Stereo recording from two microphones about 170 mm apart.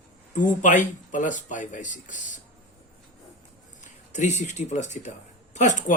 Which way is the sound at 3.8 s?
45° left (ahead or behind).